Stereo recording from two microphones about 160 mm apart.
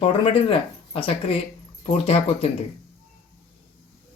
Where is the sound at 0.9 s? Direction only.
35° left (ahead or behind).